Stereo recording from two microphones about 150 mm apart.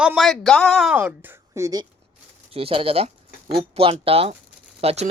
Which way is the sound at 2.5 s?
40° right (ahead or behind).